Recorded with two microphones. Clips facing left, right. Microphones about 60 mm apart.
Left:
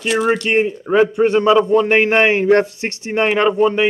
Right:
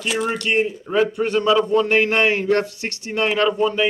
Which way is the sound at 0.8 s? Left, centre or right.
Left.